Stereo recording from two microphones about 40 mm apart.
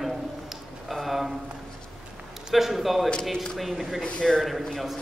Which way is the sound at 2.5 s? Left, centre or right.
Centre.